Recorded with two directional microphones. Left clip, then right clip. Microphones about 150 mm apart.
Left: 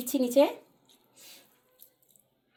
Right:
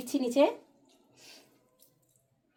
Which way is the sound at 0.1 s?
35° left (ahead or behind).